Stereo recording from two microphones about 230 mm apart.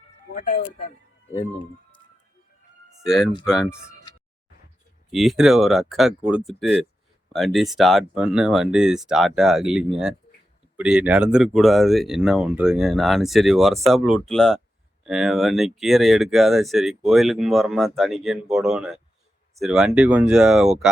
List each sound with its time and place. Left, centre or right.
0.3 s speech: left
1.3 s speech: centre
3.0 s speech: centre
3.7 s a sound: centre
5.1 s speech: centre